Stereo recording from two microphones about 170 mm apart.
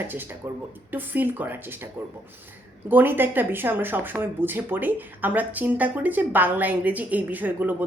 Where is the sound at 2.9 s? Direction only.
10° right (ahead or behind).